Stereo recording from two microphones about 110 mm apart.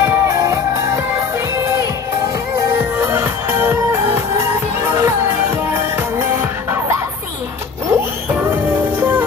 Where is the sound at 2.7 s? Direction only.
25° right (ahead or behind).